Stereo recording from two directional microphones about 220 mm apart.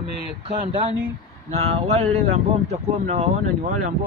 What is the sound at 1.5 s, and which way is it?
Speech, 30° right (ahead or behind).